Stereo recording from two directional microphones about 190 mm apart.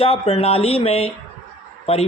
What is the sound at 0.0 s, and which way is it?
Speech, 30° left (ahead or behind).